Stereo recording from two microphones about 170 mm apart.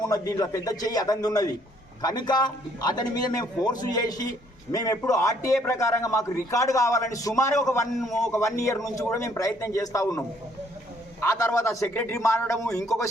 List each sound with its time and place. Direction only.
0.1 s a man's voice: 20° left (ahead or behind)
7.9 s a man's voice: centre (ahead or behind)
8.3 s speech: 15° left (ahead or behind)